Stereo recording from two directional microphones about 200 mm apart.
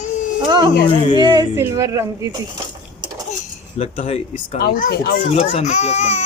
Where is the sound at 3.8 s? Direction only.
30° left (ahead or behind).